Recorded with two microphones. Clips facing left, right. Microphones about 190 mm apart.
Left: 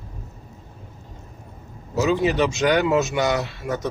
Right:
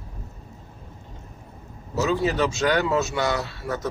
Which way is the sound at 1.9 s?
15° left (ahead or behind).